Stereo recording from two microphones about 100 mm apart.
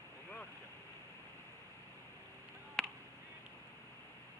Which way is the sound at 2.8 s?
5° left (ahead or behind).